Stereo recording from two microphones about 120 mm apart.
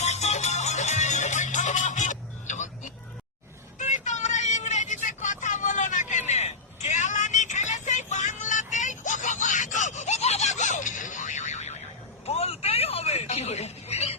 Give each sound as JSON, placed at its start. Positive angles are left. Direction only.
{"t": 0.0, "sound": "music", "side_deg": 65}
{"t": 3.8, "sound": "vehicle", "side_deg": 85}
{"t": 12.2, "sound": "a sound", "side_deg": 60}